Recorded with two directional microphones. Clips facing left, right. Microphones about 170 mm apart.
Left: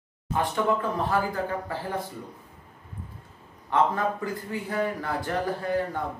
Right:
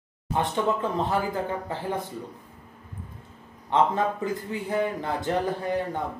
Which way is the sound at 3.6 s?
20° right (ahead or behind).